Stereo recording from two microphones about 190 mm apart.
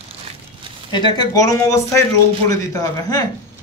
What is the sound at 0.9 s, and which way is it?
Speech, 25° left (ahead or behind).